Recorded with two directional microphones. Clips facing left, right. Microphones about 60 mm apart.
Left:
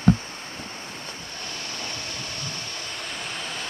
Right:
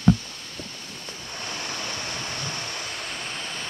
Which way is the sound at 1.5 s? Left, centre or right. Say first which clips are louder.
Right 3 dB; right.